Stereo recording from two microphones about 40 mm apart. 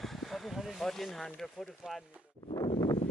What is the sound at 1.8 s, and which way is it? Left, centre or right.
Speech, centre.